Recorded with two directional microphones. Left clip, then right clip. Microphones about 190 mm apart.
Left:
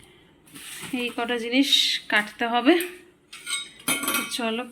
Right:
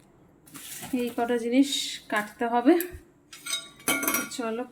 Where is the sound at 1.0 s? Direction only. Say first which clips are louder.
Even; 15° right (ahead or behind).